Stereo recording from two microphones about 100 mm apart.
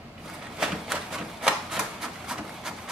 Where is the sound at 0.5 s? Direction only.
5° right (ahead or behind).